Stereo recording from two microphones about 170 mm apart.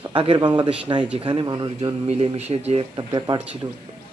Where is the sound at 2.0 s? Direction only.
35° right (ahead or behind).